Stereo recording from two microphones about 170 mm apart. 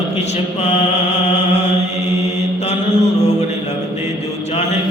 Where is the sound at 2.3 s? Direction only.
40° left (ahead or behind).